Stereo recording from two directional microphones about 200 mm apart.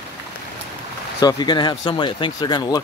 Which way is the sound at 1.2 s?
20° left (ahead or behind).